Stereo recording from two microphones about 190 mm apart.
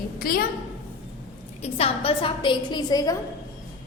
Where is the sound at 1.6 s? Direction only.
30° left (ahead or behind).